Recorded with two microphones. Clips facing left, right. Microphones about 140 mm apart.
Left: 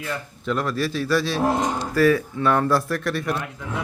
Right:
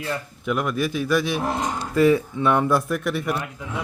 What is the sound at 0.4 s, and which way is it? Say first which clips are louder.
Speech: even; 15° right (ahead or behind).